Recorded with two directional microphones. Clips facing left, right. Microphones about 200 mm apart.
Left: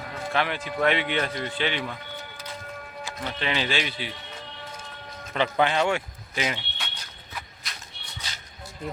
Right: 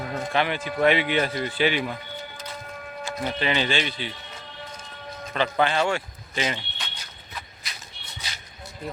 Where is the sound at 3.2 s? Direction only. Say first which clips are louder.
Right 3 dB; 5° right (ahead or behind).